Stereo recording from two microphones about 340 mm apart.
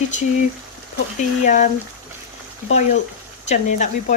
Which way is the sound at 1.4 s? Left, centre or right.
Left.